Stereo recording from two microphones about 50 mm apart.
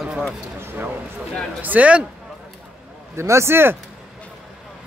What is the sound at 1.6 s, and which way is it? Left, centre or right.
Speech, right.